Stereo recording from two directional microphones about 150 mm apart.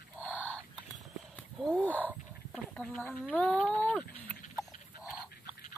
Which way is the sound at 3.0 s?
10° left (ahead or behind).